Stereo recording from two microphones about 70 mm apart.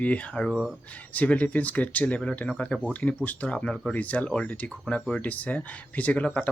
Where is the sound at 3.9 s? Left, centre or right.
Left.